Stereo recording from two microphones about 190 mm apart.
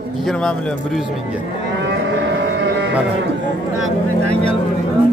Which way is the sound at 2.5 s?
70° right (ahead or behind).